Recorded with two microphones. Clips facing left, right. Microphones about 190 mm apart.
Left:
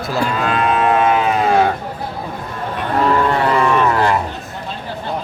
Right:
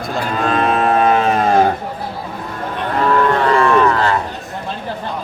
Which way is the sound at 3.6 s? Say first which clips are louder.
Right 1 dB; 15° left (ahead or behind).